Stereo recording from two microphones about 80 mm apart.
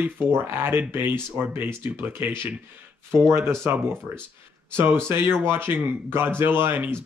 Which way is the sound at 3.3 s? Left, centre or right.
Right.